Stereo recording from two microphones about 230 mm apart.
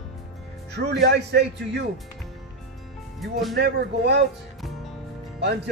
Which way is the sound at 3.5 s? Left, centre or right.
Right.